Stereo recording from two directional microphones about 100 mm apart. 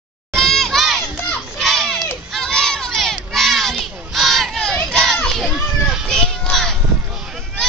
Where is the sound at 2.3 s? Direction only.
5° left (ahead or behind).